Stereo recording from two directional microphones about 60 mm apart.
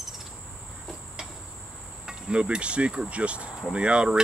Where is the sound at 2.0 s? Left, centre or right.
Centre.